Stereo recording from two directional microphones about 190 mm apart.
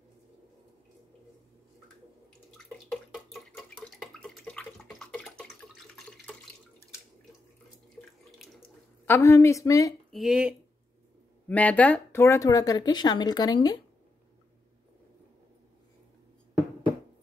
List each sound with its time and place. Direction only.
3.5 s bathtub: centre (ahead or behind)
9.0 s a woman's voice: 15° left (ahead or behind)
10.1 s speech: 5° right (ahead or behind)
11.4 s speech: 10° left (ahead or behind)